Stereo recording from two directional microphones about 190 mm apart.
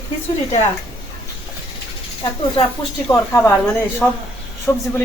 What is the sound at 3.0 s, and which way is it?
Speech, 10° left (ahead or behind).